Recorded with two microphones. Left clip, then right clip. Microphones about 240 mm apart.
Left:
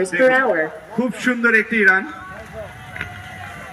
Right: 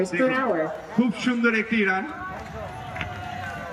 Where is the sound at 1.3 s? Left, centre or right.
Left.